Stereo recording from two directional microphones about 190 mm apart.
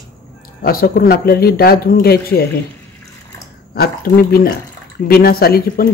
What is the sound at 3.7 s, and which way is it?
Speech, 55° left (ahead or behind).